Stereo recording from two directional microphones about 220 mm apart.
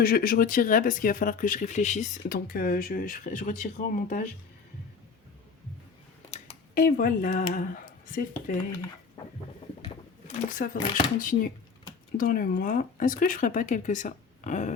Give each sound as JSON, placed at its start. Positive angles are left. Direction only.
{"t": 0.0, "sound": "speech", "side_deg": 40}
{"t": 6.3, "sound": "speech", "side_deg": 35}
{"t": 9.8, "sound": "sewing machine", "side_deg": 25}
{"t": 10.6, "sound": "speech", "side_deg": 35}